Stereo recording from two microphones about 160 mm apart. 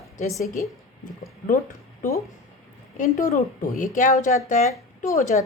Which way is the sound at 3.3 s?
50° left (ahead or behind).